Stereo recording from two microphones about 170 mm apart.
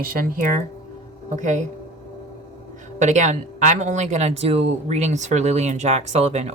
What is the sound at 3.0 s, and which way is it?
Speech, 45° right (ahead or behind).